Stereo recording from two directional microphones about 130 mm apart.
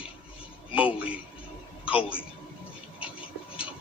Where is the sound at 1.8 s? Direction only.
45° left (ahead or behind).